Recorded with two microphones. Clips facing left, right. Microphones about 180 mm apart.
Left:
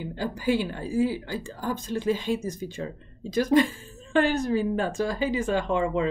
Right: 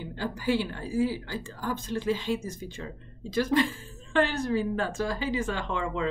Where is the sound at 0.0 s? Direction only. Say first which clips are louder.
Left 3 dB; 10° left (ahead or behind).